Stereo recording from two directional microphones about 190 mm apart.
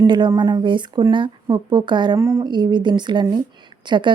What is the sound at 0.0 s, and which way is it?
Speech, 20° right (ahead or behind).